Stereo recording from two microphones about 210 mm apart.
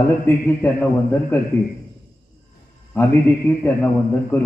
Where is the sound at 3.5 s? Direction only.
10° left (ahead or behind).